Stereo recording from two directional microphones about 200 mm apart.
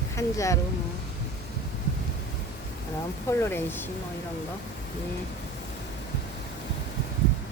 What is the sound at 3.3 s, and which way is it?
Speech, 10° left (ahead or behind).